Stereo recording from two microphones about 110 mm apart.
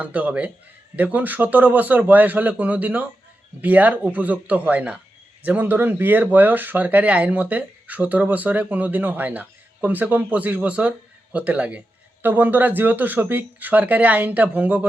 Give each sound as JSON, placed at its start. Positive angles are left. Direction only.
{"t": 0.0, "sound": "speech", "side_deg": -15}